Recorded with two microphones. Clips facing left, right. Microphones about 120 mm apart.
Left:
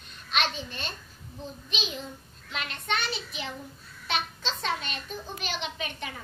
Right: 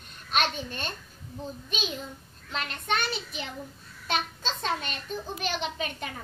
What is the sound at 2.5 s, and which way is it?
A child's voice, 40° right (ahead or behind).